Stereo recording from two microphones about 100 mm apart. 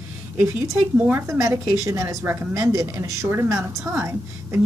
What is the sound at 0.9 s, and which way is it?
Speech, 20° right (ahead or behind).